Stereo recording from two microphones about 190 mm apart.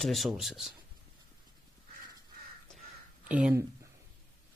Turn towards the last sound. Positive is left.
turn(degrees=-5)  # may be behind; listen again after turning